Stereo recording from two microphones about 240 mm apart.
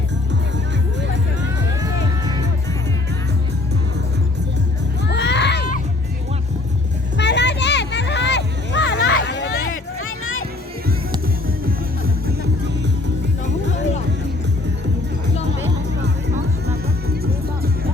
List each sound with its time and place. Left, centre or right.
1.8 s music: centre
5.0 s a sound: left
7.2 s children playing: left
10.0 s music: left